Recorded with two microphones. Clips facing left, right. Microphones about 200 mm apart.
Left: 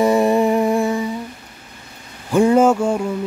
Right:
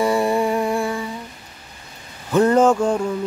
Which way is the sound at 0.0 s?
20° left (ahead or behind).